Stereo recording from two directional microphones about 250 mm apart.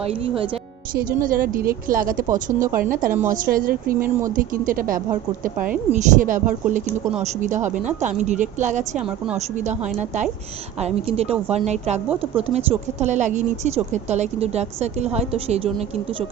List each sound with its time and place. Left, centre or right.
0.0 s speech: right
0.9 s speech: right
9.0 s speech: centre
9.6 s speech: right